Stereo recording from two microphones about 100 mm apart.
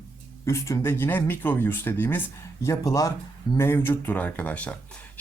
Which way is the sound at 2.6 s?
30° left (ahead or behind).